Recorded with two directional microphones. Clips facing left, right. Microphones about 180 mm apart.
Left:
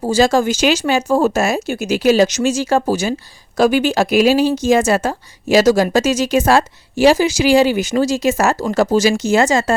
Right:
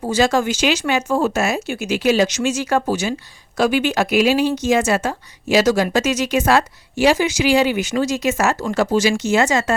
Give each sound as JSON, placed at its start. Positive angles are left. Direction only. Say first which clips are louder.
{"t": 0.0, "sound": "a woman's voice", "louder": "left 3 dB", "side_deg": 35}